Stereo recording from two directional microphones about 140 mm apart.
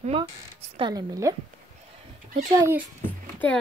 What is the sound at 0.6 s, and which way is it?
Speech, 40° right (ahead or behind).